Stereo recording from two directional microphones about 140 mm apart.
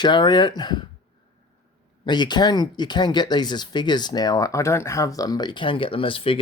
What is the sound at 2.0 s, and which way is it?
Speech, 30° left (ahead or behind).